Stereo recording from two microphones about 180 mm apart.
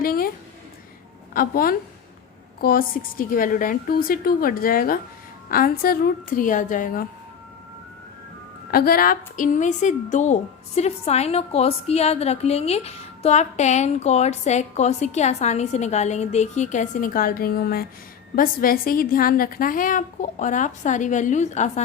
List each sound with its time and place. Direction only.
0.0 s a sound: 55° left (ahead or behind)
1.3 s a woman's voice: 50° left (ahead or behind)
8.7 s a woman's voice: 55° left (ahead or behind); by 21.7 s 40° left (ahead or behind)